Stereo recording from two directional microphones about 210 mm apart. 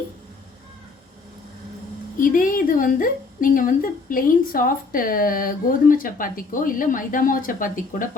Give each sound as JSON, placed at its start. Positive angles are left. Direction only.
{"t": 2.1, "sound": "a woman's voice", "side_deg": 40}